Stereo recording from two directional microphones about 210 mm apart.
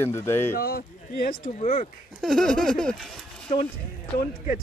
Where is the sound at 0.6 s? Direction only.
45° left (ahead or behind).